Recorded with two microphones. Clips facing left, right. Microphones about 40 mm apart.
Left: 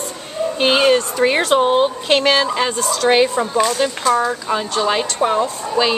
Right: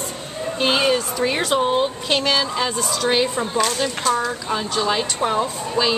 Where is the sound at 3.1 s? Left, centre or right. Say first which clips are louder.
Left 6 dB; left.